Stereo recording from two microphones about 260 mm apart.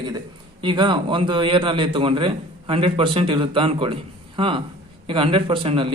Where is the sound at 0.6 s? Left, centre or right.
Centre.